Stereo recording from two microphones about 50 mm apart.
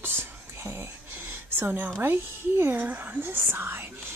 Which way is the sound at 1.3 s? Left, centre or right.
Right.